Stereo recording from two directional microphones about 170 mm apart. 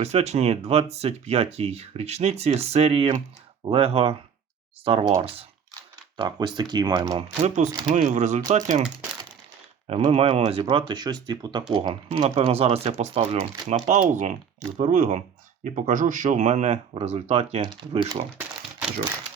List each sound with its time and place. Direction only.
0.0 s speech: 40° right (ahead or behind)
6.1 s speech: 25° right (ahead or behind)
7.4 s speech: 45° right (ahead or behind)
9.8 s speech: 35° right (ahead or behind)